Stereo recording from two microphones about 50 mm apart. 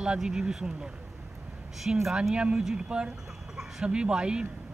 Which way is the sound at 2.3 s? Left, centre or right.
Right.